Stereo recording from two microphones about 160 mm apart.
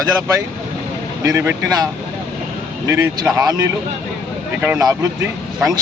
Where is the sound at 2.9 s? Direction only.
20° right (ahead or behind).